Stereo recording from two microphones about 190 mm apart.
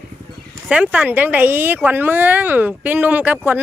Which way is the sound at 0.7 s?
5° right (ahead or behind).